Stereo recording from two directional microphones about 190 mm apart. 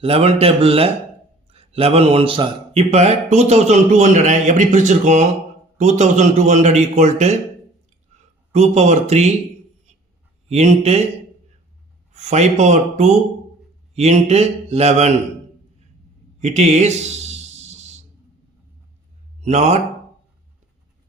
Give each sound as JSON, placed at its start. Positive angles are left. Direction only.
{"t": 0.0, "sound": "speech", "side_deg": -30}
{"t": 8.5, "sound": "speech", "side_deg": -35}
{"t": 10.5, "sound": "speech", "side_deg": -35}
{"t": 12.1, "sound": "speech", "side_deg": -35}
{"t": 16.4, "sound": "a sound", "side_deg": -35}
{"t": 19.4, "sound": "speech", "side_deg": -35}